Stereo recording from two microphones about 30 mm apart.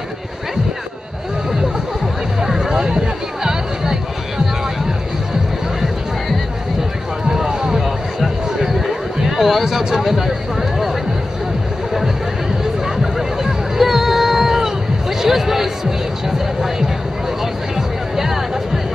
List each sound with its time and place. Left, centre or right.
2.4 s music: centre
2.7 s a sound: right
3.4 s music: right
7.2 s run: right
9.4 s a sound: centre
12.8 s music: centre
17.7 s music: centre